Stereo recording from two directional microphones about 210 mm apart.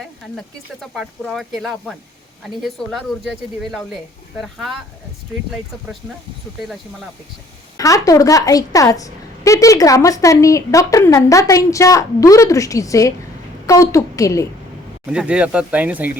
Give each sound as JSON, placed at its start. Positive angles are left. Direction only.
{"t": 0.0, "sound": "speech", "side_deg": 0}
{"t": 7.8, "sound": "a woman's voice", "side_deg": 15}
{"t": 15.1, "sound": "speech", "side_deg": -5}